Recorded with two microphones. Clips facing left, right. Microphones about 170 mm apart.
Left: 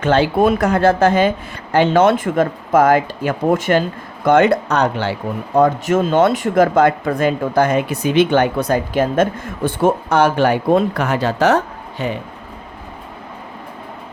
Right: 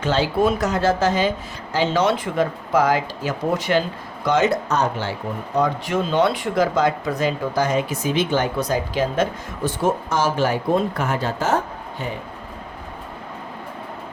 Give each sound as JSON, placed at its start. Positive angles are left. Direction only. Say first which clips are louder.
{"t": 0.0, "sound": "speech", "louder": "left 5 dB", "side_deg": 55}
{"t": 5.5, "sound": "speech", "louder": "left 7 dB", "side_deg": 50}